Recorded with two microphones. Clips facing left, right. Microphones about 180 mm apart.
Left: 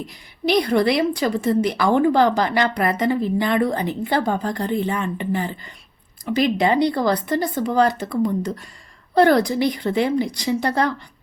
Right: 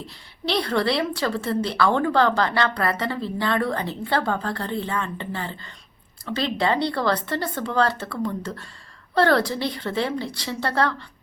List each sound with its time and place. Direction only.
0.0 s a woman's voice: 15° left (ahead or behind)